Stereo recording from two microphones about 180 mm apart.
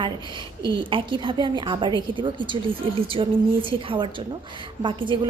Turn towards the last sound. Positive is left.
turn(degrees=-25)  # may be behind; listen again after turning